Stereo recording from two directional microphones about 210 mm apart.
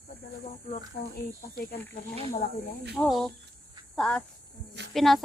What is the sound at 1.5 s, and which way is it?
Speech, 50° left (ahead or behind).